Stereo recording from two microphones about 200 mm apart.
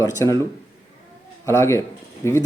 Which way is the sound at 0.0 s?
15° left (ahead or behind).